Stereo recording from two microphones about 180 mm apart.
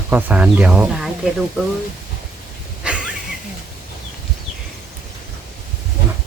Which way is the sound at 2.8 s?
5° right (ahead or behind).